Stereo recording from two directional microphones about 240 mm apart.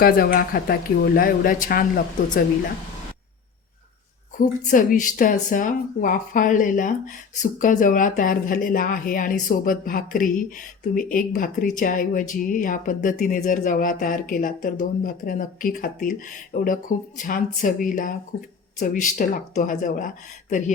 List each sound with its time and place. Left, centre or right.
0.0 s speech: left
4.4 s speech: left